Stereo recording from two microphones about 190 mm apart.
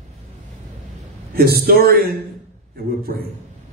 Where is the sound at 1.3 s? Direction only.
55° right (ahead or behind).